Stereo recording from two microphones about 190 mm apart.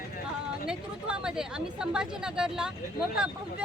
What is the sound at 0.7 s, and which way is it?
A woman's voice, 5° right (ahead or behind).